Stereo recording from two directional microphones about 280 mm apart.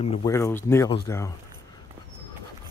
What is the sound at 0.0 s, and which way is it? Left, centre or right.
Speech, centre.